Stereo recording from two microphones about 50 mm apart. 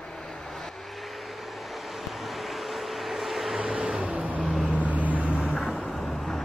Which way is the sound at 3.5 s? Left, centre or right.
Centre.